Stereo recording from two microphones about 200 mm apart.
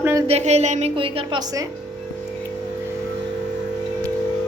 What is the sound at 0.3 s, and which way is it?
A woman's voice, 35° right (ahead or behind).